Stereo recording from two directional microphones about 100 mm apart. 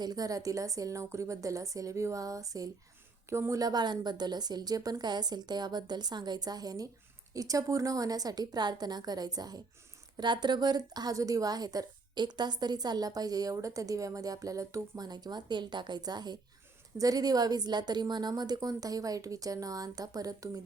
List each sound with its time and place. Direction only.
0.0 s a woman's voice: 40° right (ahead or behind)